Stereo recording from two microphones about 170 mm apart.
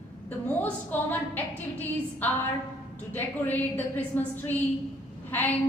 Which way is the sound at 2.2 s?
10° left (ahead or behind).